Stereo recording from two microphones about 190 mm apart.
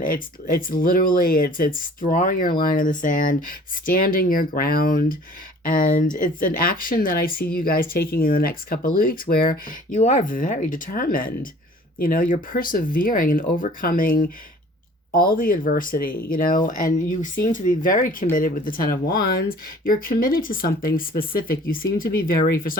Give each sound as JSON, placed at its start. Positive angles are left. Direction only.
{"t": 0.0, "sound": "speech", "side_deg": 50}
{"t": 15.4, "sound": "speech", "side_deg": 50}